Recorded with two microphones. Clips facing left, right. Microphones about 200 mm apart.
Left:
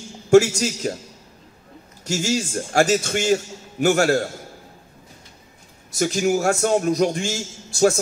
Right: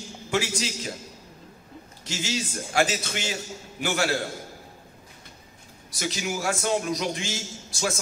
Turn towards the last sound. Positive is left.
turn(degrees=45)  # may be behind; listen again after turning